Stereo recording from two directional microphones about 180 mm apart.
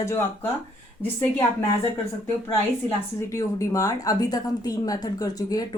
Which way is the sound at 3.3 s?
20° left (ahead or behind).